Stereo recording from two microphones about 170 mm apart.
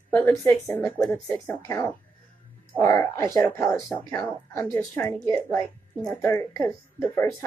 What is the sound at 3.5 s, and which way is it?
Speech, 5° left (ahead or behind).